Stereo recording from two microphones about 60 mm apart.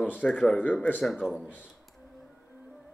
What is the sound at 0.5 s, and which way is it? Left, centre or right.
Speech, left.